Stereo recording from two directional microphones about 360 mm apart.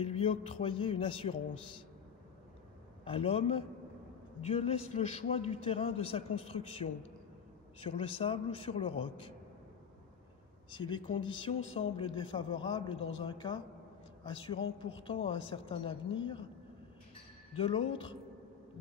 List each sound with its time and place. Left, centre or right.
0.0 s a man's voice: centre
3.1 s a man's voice: centre
10.7 s a man's voice: centre
17.6 s a man's voice: centre